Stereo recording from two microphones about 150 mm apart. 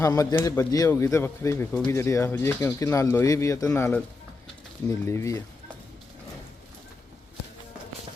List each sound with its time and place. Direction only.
0.0 s speech: 25° left (ahead or behind)